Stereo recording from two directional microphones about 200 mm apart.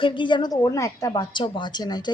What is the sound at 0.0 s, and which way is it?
A woman's voice, 25° left (ahead or behind).